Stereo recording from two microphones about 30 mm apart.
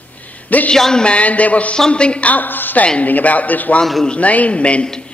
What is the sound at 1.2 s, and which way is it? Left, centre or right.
Speech, left.